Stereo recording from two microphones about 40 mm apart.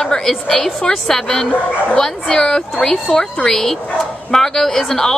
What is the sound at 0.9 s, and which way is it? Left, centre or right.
A woman's voice, left.